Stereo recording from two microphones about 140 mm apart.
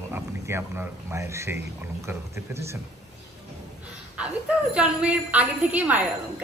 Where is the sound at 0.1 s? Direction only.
15° right (ahead or behind).